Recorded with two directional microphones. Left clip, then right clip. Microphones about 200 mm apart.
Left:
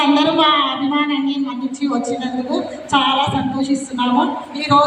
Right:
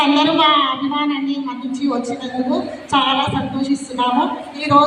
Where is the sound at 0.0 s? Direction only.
55° left (ahead or behind).